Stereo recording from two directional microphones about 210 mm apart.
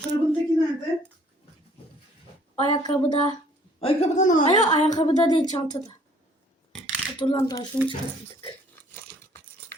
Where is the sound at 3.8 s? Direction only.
35° left (ahead or behind).